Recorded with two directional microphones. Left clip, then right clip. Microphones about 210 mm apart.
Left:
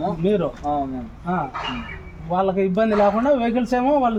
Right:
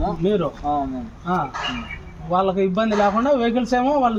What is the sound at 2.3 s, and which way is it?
A man's voice, 10° right (ahead or behind).